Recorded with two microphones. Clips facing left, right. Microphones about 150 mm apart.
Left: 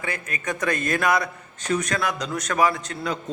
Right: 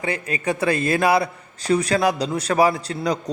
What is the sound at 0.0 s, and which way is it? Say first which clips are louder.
A man's voice: right 6 dB; 35° right (ahead or behind).